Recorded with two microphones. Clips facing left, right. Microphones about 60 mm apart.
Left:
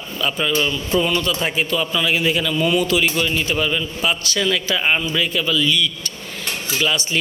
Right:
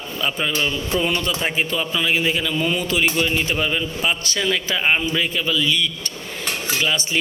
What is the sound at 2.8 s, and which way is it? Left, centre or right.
A man's voice, right.